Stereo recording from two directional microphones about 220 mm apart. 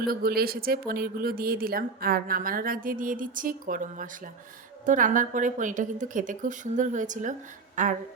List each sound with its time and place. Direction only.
0.0 s speech: 40° right (ahead or behind)